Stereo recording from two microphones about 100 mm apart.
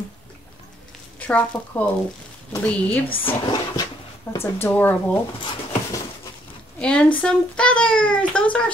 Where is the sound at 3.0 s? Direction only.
60° left (ahead or behind).